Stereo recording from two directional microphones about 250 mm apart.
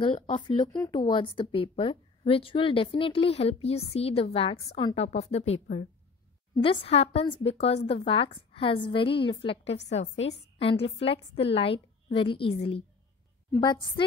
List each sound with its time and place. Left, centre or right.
0.0 s a woman's voice: left
0.7 s a woman's voice: centre